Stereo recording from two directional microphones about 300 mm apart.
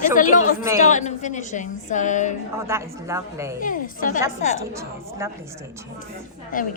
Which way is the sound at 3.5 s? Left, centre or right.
Left.